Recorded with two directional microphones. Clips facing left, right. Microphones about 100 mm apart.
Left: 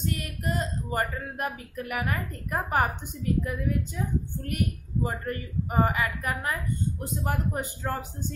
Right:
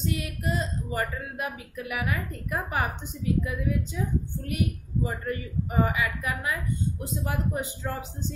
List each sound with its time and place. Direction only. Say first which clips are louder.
0.0 s speech: right 1 dB; 45° left (ahead or behind)